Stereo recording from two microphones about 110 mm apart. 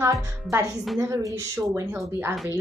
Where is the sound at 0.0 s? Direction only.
25° right (ahead or behind).